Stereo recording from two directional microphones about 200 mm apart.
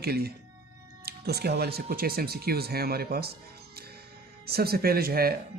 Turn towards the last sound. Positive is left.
turn(degrees=-50)  # may be behind; listen again after turning